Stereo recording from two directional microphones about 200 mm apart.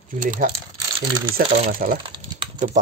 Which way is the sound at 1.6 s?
40° right (ahead or behind).